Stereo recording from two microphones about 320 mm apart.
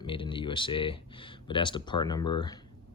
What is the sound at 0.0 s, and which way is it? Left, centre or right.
Speech, centre.